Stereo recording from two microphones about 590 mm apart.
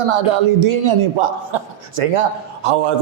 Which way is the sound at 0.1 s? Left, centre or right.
Right.